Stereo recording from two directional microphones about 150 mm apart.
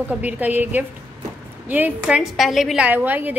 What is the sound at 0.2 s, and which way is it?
A woman's voice, 10° right (ahead or behind).